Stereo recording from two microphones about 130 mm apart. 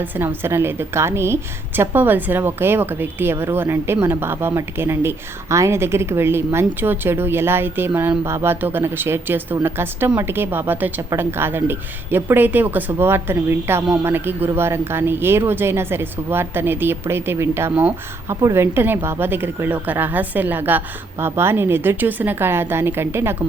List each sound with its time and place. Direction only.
0.0 s speech: 15° right (ahead or behind)